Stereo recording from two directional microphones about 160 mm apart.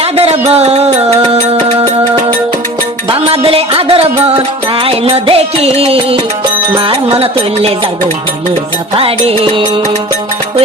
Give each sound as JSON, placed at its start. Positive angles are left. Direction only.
{"t": 0.0, "sound": "music", "side_deg": -40}
{"t": 9.0, "sound": "music", "side_deg": -35}